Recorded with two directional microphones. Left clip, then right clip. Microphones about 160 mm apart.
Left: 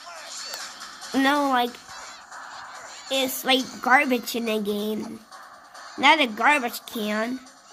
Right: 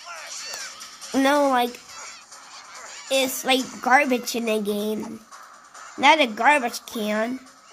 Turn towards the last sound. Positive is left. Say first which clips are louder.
# right 2 dB
turn(degrees=-10)  # may be behind; listen again after turning